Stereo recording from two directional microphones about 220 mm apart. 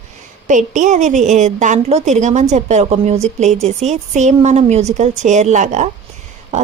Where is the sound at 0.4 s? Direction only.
35° right (ahead or behind).